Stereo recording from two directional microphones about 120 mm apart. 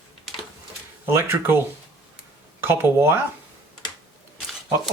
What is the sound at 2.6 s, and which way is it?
Speech, 20° right (ahead or behind).